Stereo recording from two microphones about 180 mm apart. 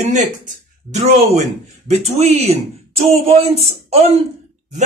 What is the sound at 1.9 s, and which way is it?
Speech, 35° right (ahead or behind).